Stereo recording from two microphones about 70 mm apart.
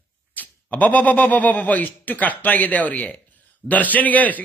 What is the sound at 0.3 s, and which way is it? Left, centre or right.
A man's voice, left.